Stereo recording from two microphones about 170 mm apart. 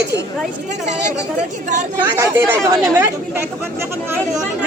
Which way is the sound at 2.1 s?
20° right (ahead or behind).